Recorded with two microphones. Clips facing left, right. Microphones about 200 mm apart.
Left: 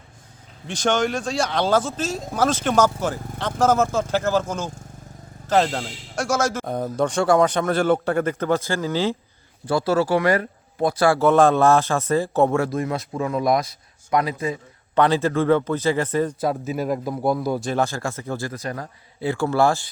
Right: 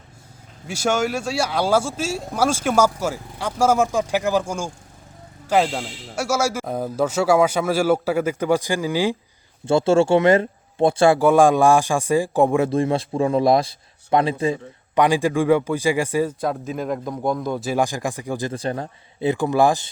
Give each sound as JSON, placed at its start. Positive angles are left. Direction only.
{"t": 0.7, "sound": "speech", "side_deg": -10}
{"t": 9.6, "sound": "a man's voice", "side_deg": -25}
{"t": 11.2, "sound": "speech", "side_deg": -10}
{"t": 12.7, "sound": "a man's voice", "side_deg": -30}
{"t": 14.9, "sound": "speech", "side_deg": -10}
{"t": 16.4, "sound": "a man's voice", "side_deg": 5}
{"t": 17.7, "sound": "speech", "side_deg": -15}
{"t": 18.5, "sound": "a man's voice", "side_deg": -30}